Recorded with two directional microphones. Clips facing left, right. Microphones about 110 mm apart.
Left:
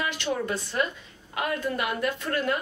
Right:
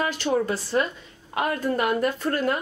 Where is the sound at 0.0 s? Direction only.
35° right (ahead or behind).